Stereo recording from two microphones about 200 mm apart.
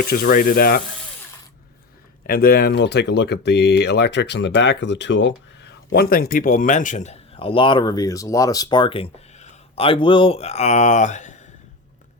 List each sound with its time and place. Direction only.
0.0 s speech: 50° left (ahead or behind)
2.2 s speech: 50° left (ahead or behind)